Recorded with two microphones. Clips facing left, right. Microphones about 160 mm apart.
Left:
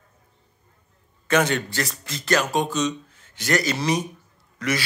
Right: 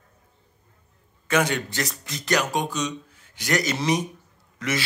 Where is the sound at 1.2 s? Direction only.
10° right (ahead or behind).